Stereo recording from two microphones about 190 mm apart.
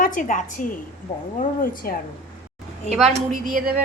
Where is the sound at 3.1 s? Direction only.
40° right (ahead or behind).